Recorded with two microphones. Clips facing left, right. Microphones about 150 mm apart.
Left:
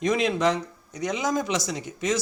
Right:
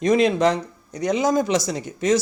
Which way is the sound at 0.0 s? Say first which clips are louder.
Right 5 dB; 35° right (ahead or behind).